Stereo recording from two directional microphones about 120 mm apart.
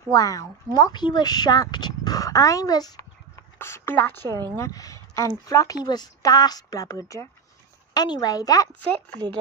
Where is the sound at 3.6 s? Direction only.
20° left (ahead or behind).